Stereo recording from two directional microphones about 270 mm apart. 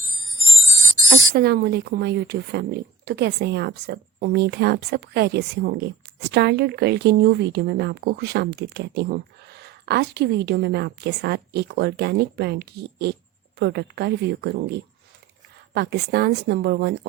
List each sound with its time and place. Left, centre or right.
1.1 s speech: right